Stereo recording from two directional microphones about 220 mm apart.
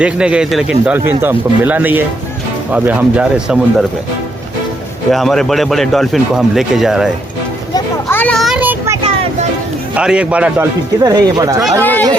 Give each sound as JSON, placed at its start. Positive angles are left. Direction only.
{"t": 0.0, "sound": "speech", "side_deg": -5}
{"t": 5.1, "sound": "speech", "side_deg": 0}
{"t": 7.7, "sound": "a sound", "side_deg": 10}
{"t": 9.0, "sound": "a sound", "side_deg": -25}
{"t": 9.9, "sound": "speech", "side_deg": -5}
{"t": 11.0, "sound": "speech", "side_deg": -15}
{"t": 11.8, "sound": "speech", "side_deg": 10}